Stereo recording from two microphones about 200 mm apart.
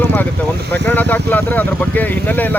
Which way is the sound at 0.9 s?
10° left (ahead or behind).